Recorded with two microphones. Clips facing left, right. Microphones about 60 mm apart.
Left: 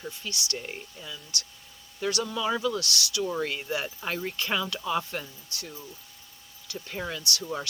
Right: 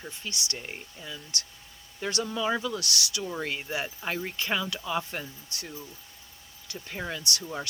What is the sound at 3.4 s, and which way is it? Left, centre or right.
Speech, centre.